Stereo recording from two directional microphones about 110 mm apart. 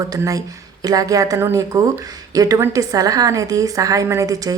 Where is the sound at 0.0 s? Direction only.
30° right (ahead or behind).